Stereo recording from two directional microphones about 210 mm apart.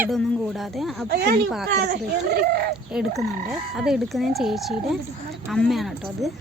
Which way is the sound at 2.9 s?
5° right (ahead or behind).